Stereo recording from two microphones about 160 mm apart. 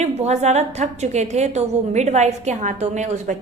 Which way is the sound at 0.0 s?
45° right (ahead or behind).